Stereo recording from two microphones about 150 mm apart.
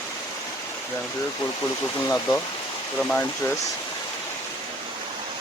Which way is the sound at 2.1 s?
10° left (ahead or behind).